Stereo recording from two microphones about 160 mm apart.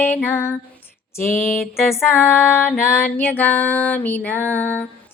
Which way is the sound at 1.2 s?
60° left (ahead or behind).